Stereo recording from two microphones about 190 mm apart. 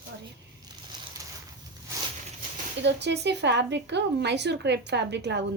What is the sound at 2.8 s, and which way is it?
A woman's voice, 65° right (ahead or behind).